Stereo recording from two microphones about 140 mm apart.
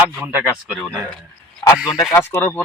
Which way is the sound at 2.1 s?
15° left (ahead or behind).